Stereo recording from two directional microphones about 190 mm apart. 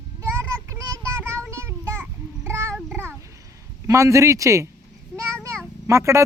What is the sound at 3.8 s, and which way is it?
Speech, 15° right (ahead or behind).